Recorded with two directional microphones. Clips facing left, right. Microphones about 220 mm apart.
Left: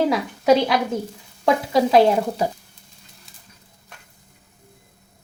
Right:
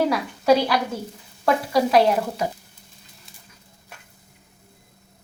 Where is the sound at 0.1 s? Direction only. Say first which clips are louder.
Left 2 dB; 20° left (ahead or behind).